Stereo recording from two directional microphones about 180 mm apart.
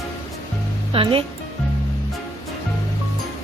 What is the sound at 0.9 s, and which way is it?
Speech, 30° right (ahead or behind).